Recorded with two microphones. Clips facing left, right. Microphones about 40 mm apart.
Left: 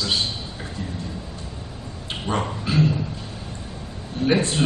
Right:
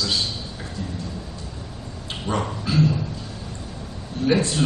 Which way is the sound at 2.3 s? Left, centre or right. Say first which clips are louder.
Even; left.